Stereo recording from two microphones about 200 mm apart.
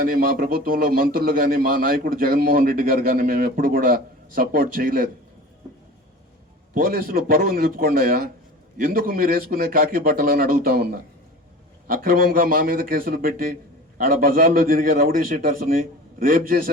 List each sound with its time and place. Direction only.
0.0 s a man's voice: 45° right (ahead or behind)
6.7 s a man's voice: 45° right (ahead or behind)